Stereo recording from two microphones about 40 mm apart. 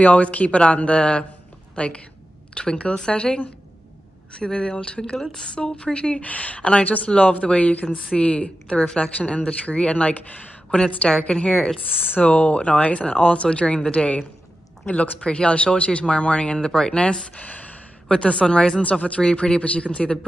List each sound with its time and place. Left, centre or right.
0.0 s a woman's voice: left
11.9 s speech: right
12.2 s a woman's voice: left
16.5 s speech: centre
17.4 s speech: left
18.0 s a woman's voice: left